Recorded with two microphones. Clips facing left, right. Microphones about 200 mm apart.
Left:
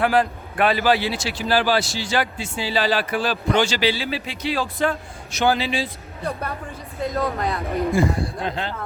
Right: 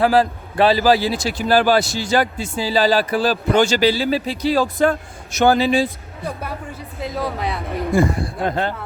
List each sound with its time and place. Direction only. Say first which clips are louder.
0.0 s a man's voice: right 4 dB; 35° right (ahead or behind)
7.1 s a man's voice: even; 5° right (ahead or behind)
7.9 s speech: right 3 dB; 50° right (ahead or behind)